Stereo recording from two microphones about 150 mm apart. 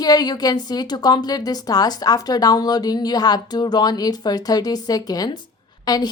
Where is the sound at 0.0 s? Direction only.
25° left (ahead or behind).